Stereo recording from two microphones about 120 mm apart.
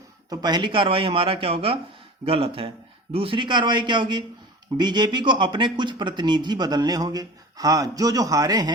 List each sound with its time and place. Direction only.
0.3 s a man's voice: 35° right (ahead or behind)